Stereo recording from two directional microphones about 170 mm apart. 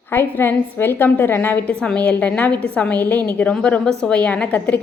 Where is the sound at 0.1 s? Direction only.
15° left (ahead or behind).